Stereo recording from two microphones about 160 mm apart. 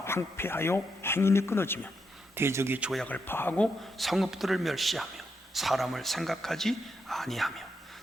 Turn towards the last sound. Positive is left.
turn(degrees=0)  # may be behind; listen again after turning